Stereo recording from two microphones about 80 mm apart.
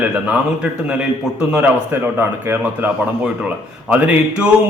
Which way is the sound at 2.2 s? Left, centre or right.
Right.